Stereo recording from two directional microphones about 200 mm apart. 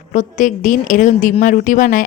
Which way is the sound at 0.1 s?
40° left (ahead or behind).